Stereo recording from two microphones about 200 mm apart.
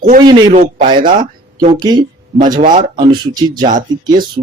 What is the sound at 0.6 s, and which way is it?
Speech, 40° right (ahead or behind).